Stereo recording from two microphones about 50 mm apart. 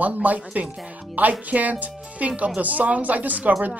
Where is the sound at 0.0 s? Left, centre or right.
Right.